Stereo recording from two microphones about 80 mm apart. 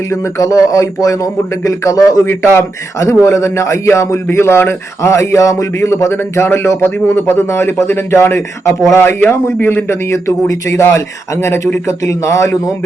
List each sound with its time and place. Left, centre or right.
0.1 s speech: left
2.2 s a man's voice: left
3.2 s a man's voice: left
9.9 s a man's voice: left